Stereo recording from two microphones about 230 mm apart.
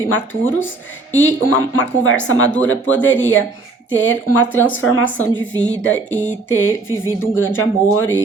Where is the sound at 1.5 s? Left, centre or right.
Left.